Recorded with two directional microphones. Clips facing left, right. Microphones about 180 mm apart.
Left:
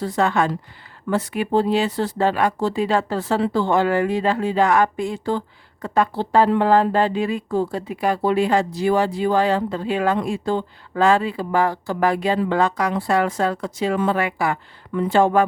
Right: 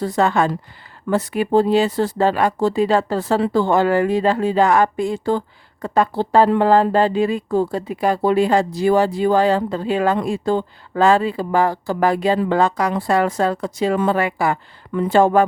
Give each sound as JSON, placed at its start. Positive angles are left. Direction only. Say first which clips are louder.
{"t": 0.0, "sound": "a woman's voice", "louder": "right 2 dB", "side_deg": -40}